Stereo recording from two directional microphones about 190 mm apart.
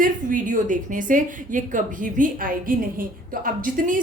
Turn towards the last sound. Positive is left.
turn(degrees=-45)  # may be behind; listen again after turning